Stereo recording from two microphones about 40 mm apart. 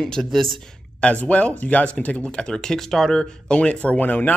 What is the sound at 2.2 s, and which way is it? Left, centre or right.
Speech, left.